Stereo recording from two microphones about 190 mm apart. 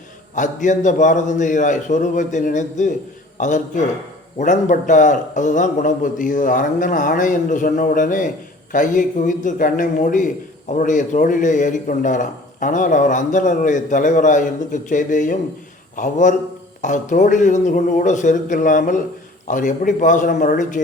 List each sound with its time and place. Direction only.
0.3 s a man's voice: 40° left (ahead or behind)